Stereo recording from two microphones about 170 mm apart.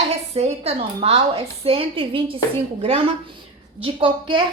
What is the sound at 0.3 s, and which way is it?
A woman's voice, 40° right (ahead or behind).